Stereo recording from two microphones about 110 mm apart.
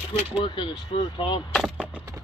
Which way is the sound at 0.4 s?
45° left (ahead or behind).